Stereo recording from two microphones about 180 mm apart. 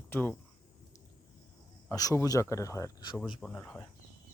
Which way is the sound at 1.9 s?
15° left (ahead or behind).